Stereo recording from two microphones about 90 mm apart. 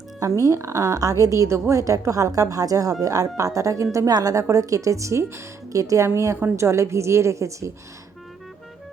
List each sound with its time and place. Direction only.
0.2 s a woman's voice: 40° right (ahead or behind)